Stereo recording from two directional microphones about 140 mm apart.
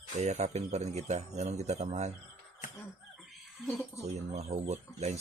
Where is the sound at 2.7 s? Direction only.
Centre (ahead or behind).